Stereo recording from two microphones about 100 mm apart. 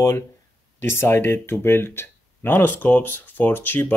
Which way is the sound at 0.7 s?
25° left (ahead or behind).